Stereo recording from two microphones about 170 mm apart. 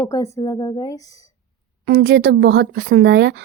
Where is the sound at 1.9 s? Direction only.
80° right.